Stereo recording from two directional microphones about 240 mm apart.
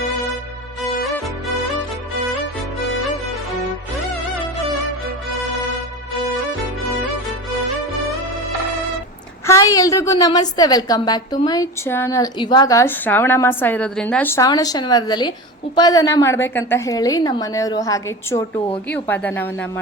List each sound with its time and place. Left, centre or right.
9.5 s a woman's voice: centre